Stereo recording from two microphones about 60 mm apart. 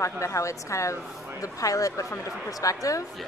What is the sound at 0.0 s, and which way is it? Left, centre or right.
Speech, left.